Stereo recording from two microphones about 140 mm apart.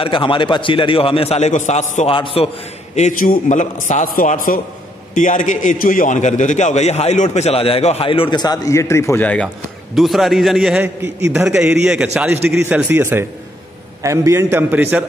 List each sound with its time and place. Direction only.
0.0 s a man's voice: 35° left (ahead or behind); by 2.0 s 60° left (ahead or behind)
2.0 s a man's voice: 40° left (ahead or behind)
3.0 s a man's voice: 70° left (ahead or behind)
5.1 s a man's voice: 65° left (ahead or behind); by 9.5 s 10° left (ahead or behind)
9.9 s a man's voice: centre (ahead or behind)